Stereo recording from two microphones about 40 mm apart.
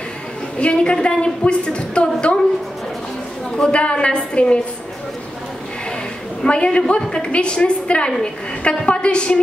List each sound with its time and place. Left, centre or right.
0.6 s a woman's voice: left
3.5 s a woman's voice: left
6.4 s a woman's voice: left